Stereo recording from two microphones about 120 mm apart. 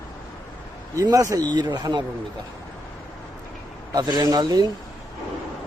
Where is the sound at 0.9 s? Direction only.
30° right (ahead or behind).